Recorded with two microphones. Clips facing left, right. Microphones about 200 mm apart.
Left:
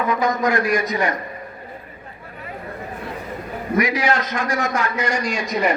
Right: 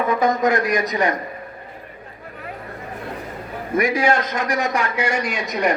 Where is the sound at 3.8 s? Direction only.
50° right (ahead or behind).